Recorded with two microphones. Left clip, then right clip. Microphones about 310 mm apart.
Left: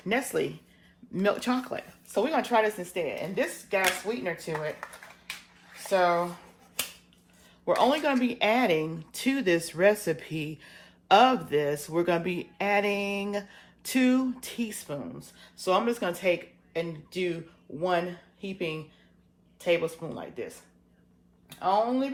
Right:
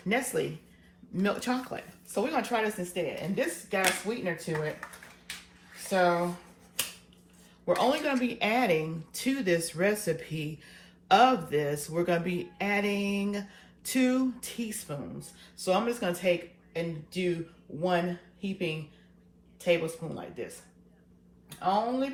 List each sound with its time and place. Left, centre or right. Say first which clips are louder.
0.1 s speech: left 1 dB; left
5.7 s a sound: left 2 dB; left
7.6 s speech: left 3 dB; left
21.6 s speech: left 2 dB; left